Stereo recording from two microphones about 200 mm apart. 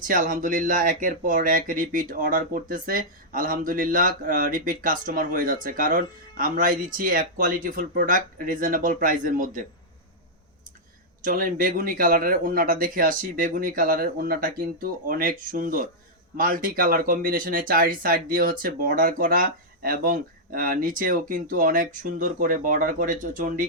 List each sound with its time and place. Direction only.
0.0 s speech: 40° right (ahead or behind)
11.2 s speech: 45° right (ahead or behind)